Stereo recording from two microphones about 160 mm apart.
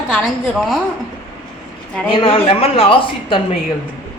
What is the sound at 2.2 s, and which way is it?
Speech, 35° left (ahead or behind).